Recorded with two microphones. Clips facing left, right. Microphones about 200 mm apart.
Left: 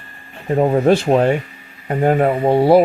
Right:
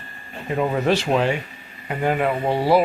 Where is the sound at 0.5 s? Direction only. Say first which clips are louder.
Left 7 dB; 35° left (ahead or behind).